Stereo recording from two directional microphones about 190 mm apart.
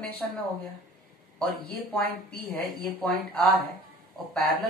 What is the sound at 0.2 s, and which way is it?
Speech, 5° left (ahead or behind).